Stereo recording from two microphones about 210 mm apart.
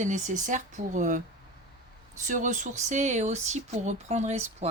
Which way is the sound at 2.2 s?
35° right (ahead or behind).